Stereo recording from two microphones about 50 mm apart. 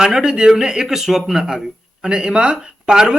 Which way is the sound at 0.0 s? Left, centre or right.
Centre.